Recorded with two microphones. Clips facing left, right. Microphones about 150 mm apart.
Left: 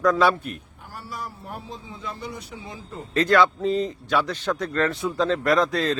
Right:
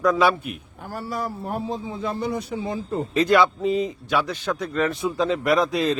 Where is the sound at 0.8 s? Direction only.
50° right (ahead or behind).